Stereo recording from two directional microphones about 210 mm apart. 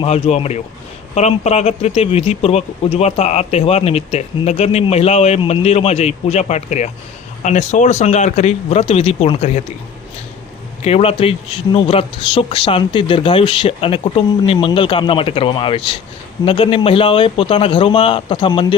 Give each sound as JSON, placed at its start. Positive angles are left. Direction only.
{"t": 0.0, "sound": "speech", "side_deg": 30}
{"t": 10.8, "sound": "speech", "side_deg": 30}